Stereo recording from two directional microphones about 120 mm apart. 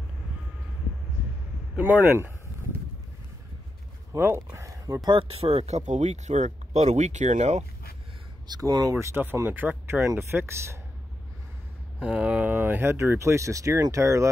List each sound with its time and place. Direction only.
1.8 s speech: 15° right (ahead or behind)
4.1 s speech: 25° right (ahead or behind)
5.3 s speech: 55° right (ahead or behind); by 7.6 s 75° right (ahead or behind)
8.5 s speech: 30° right (ahead or behind)
12.0 s speech: 10° right (ahead or behind); by 14.3 s 25° right (ahead or behind)